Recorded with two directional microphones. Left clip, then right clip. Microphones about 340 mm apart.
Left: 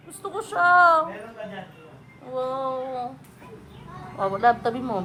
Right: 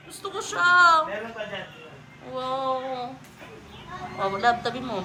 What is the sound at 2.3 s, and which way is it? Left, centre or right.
Speech, centre.